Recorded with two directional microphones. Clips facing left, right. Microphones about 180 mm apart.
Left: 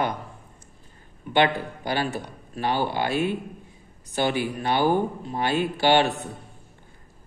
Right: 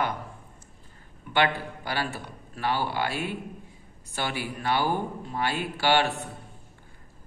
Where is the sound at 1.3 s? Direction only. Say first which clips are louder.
Left 4 dB; 20° left (ahead or behind).